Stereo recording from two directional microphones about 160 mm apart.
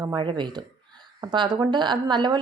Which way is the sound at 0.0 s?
25° right (ahead or behind).